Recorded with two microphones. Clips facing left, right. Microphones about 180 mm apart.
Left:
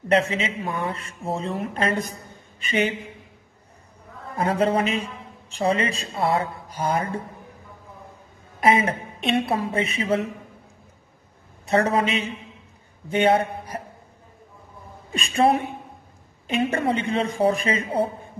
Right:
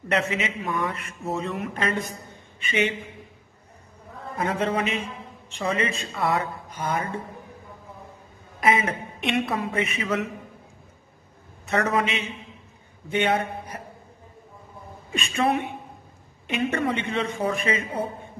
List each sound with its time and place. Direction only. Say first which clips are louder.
0.1 s a woman's voice: left 4 dB; 30° left (ahead or behind)
4.4 s a woman's voice: left 4 dB; 35° left (ahead or behind)
8.5 s a woman's voice: left 3 dB; 30° left (ahead or behind)
11.6 s a woman's voice: left 3 dB; 30° left (ahead or behind)
13.1 s a woman's voice: left 4 dB; 35° left (ahead or behind)
15.1 s a woman's voice: left 4 dB; 35° left (ahead or behind)